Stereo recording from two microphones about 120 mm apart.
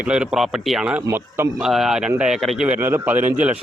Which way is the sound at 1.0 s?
20° right (ahead or behind).